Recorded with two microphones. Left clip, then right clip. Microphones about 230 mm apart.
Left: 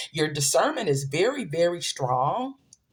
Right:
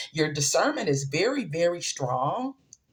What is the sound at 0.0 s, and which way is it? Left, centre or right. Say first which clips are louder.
Speech: even; left.